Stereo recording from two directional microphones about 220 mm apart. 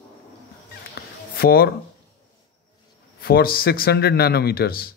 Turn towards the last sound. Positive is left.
turn(degrees=45)  # may be behind; listen again after turning